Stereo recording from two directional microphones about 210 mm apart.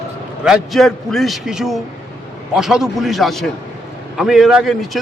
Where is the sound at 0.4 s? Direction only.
Centre (ahead or behind).